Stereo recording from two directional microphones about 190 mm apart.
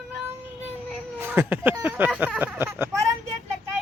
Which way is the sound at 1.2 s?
10° right (ahead or behind).